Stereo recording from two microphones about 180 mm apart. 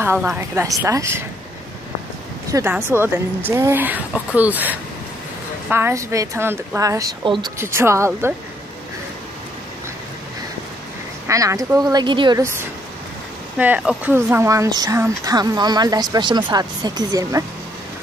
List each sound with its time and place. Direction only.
0.0 s speech: 10° right (ahead or behind)
2.7 s speech: 10° right (ahead or behind)
11.2 s speech: 20° right (ahead or behind)